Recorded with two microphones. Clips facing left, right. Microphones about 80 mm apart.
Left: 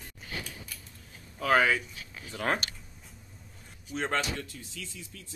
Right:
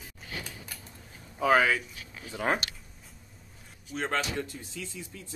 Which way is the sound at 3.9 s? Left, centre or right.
Centre.